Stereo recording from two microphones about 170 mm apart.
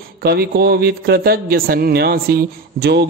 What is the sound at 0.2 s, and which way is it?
A man's voice, 65° right (ahead or behind).